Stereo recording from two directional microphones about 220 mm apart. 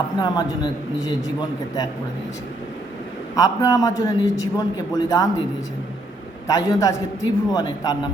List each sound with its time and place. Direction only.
0.2 s a man's voice: 20° left (ahead or behind)
3.3 s a man's voice: 15° left (ahead or behind)
6.5 s a man's voice: 15° left (ahead or behind)